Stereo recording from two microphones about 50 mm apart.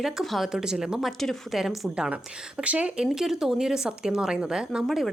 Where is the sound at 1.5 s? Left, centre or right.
Centre.